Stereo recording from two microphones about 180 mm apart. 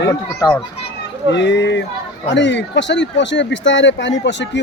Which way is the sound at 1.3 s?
75° left (ahead or behind).